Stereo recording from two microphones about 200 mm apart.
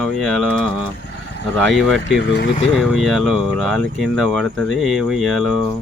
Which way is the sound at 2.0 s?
55° left (ahead or behind).